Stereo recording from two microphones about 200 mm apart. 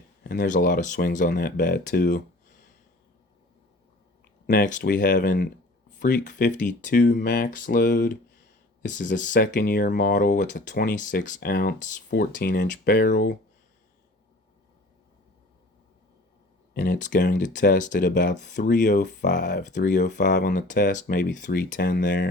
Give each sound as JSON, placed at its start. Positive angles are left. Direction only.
{"t": 0.3, "sound": "speech", "side_deg": 45}
{"t": 4.4, "sound": "speech", "side_deg": 40}
{"t": 16.7, "sound": "speech", "side_deg": 45}
{"t": 17.3, "sound": "speech", "side_deg": 40}
{"t": 19.5, "sound": "speech", "side_deg": 55}
{"t": 20.1, "sound": "speech", "side_deg": 40}